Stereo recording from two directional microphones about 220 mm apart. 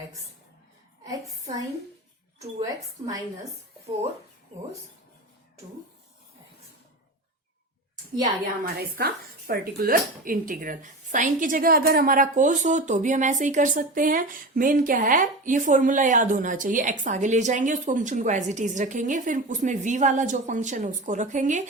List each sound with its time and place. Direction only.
1.3 s a woman's voice: 15° right (ahead or behind)
8.2 s speech: 40° right (ahead or behind)